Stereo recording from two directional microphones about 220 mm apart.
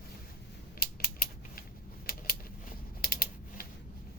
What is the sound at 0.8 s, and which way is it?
Mechanisms, 45° left (ahead or behind).